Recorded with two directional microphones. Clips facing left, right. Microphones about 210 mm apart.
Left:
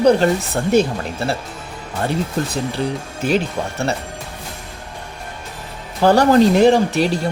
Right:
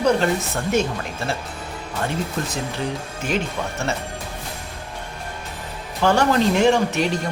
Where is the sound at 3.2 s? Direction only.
35° left (ahead or behind).